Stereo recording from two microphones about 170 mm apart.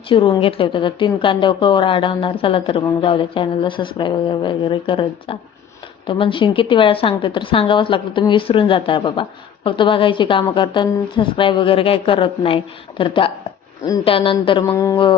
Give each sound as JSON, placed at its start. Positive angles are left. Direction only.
{"t": 0.1, "sound": "a woman's voice", "side_deg": 30}
{"t": 14.7, "sound": "a woman's voice", "side_deg": 20}